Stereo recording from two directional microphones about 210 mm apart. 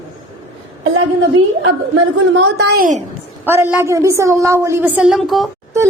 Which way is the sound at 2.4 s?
50° right (ahead or behind).